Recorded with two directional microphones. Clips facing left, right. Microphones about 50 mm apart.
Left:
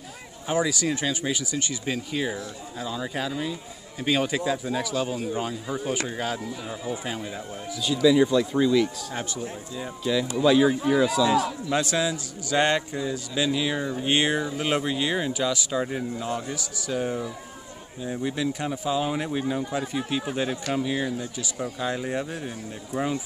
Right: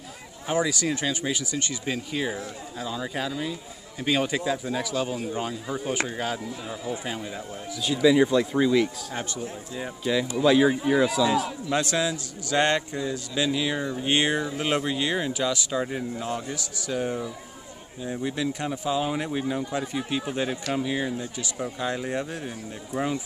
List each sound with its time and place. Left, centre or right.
0.5 s a man's voice: centre
7.8 s speech: centre
9.1 s a man's voice: centre
9.8 s speech: centre
11.7 s a man's voice: centre
21.4 s a man's voice: centre